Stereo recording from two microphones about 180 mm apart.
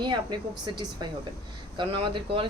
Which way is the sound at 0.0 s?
25° right (ahead or behind).